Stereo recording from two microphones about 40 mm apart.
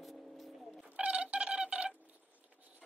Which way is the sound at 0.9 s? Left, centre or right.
Right.